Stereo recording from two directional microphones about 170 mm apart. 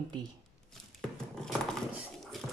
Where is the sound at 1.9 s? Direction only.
Centre (ahead or behind).